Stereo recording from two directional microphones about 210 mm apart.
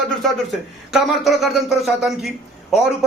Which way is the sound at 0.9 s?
Centre (ahead or behind).